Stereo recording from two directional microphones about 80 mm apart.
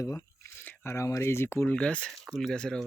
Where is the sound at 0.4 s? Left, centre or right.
Left.